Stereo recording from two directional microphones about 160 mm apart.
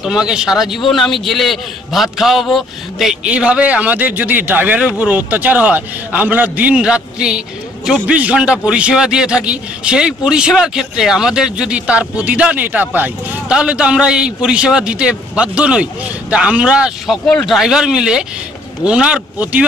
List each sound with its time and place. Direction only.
0.0 s a man's voice: 5° right (ahead or behind)